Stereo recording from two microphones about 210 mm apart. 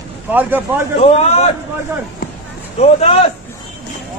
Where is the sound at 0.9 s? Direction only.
30° left (ahead or behind).